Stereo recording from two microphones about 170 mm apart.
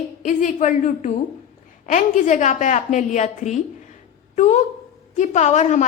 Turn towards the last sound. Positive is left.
turn(degrees=45)  # may be behind; listen again after turning